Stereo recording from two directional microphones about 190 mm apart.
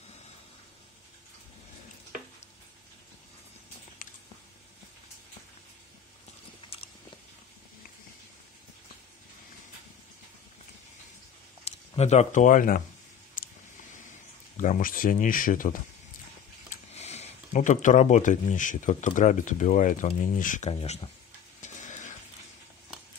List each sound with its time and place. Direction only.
11.9 s speech: 35° left (ahead or behind)
13.4 s a sound: 45° left (ahead or behind)
14.6 s speech: 45° left (ahead or behind)
16.7 s speech: 35° left (ahead or behind)
21.5 s stir: 40° left (ahead or behind)